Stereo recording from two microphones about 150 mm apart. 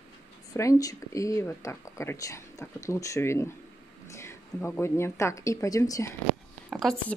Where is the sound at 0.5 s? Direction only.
20° left (ahead or behind).